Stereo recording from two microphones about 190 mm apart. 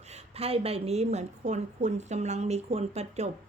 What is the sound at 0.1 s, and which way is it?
A woman's voice, 30° right (ahead or behind).